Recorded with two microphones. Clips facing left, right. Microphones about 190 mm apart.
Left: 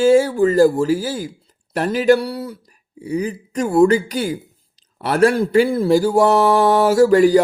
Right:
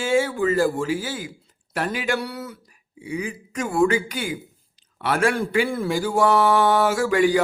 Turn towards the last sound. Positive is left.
turn(degrees=40)  # may be behind; listen again after turning